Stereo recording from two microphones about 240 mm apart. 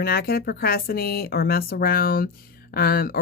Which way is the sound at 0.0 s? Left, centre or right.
Left.